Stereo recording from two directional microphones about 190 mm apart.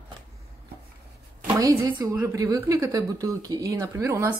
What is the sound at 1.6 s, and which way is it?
A woman's voice, 15° right (ahead or behind).